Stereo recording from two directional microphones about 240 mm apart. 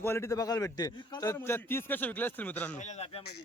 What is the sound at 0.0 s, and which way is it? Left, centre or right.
Speech, centre.